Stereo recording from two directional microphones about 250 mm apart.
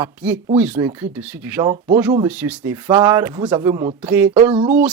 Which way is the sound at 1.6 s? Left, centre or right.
Right.